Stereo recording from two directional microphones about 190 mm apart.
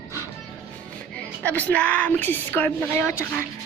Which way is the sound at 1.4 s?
10° left (ahead or behind).